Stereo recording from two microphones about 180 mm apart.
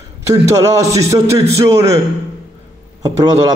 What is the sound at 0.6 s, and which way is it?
A man's voice, 20° right (ahead or behind).